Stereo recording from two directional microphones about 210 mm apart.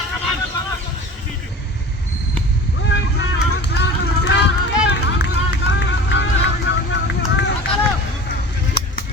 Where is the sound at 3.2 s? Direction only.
50° left (ahead or behind).